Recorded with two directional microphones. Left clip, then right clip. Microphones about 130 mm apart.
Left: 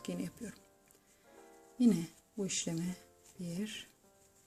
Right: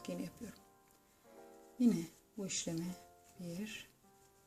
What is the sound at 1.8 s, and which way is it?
Speech, 30° left (ahead or behind).